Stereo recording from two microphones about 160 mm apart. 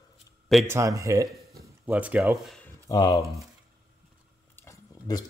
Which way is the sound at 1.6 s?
10° right (ahead or behind).